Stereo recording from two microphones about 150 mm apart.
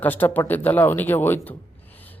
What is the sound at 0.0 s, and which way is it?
A man's voice, 10° left (ahead or behind).